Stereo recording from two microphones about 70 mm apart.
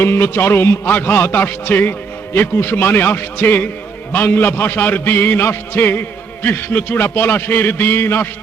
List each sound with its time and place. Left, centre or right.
0.0 s a man's voice: left